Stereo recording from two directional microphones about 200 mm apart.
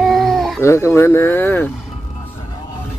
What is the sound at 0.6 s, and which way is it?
Speech, 15° left (ahead or behind).